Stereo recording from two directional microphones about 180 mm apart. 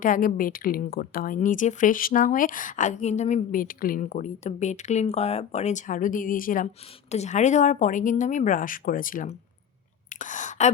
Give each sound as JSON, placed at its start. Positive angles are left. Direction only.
{"t": 0.0, "sound": "a woman's voice", "side_deg": 50}